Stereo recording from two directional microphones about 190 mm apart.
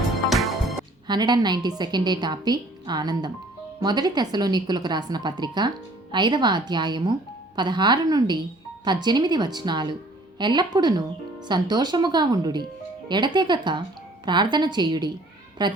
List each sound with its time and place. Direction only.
0.3 s music: centre (ahead or behind)
1.0 s a woman's voice: 20° right (ahead or behind)